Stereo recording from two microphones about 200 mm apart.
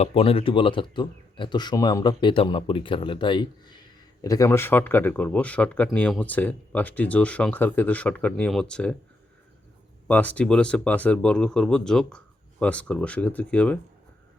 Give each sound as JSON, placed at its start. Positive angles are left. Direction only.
{"t": 0.0, "sound": "speech", "side_deg": 30}
{"t": 10.1, "sound": "speech", "side_deg": 5}